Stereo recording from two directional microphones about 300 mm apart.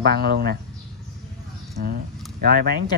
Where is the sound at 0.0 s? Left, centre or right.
Right.